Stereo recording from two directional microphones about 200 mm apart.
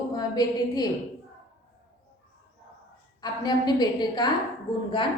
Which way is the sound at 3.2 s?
20° left (ahead or behind).